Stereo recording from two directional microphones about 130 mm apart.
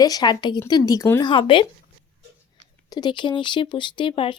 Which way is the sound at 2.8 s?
30° left (ahead or behind).